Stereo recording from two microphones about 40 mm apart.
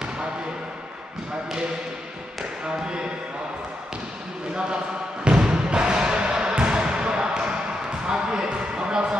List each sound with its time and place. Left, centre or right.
5.2 s music: right
8.1 s basketball bounce: centre